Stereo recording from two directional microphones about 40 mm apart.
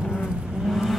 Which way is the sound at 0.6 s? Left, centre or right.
Centre.